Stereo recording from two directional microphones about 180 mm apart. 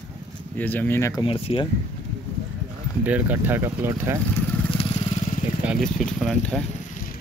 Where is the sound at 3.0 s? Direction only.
10° right (ahead or behind).